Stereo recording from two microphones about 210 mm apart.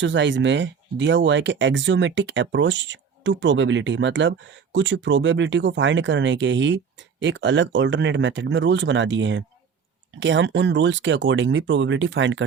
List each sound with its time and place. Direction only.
0.0 s speech: 60° right (ahead or behind)